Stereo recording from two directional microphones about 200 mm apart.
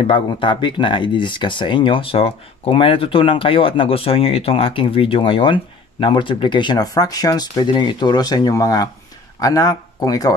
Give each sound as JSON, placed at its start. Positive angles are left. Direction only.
{"t": 0.0, "sound": "speech", "side_deg": 25}